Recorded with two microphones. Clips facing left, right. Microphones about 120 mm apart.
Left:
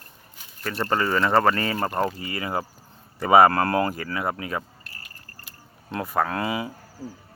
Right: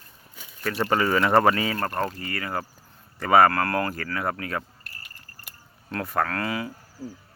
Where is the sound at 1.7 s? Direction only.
10° left (ahead or behind).